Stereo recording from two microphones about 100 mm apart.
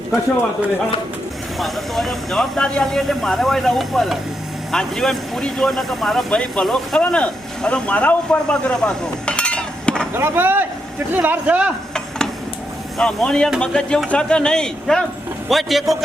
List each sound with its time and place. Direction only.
1.5 s speech: centre (ahead or behind)
10.2 s speech: 20° right (ahead or behind)
13.0 s speech: 10° left (ahead or behind)